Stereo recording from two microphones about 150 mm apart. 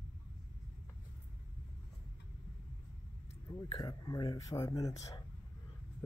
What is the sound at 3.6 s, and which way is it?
Speech, 25° left (ahead or behind).